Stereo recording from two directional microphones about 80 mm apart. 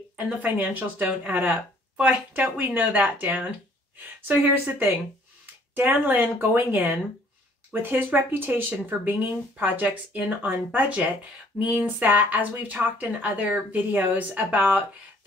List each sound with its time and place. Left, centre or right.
0.4 s speech: right